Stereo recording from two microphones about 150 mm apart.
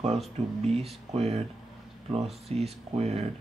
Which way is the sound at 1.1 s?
40° right (ahead or behind).